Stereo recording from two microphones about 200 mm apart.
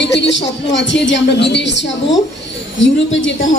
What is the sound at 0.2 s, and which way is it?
A woman's voice, 65° left (ahead or behind).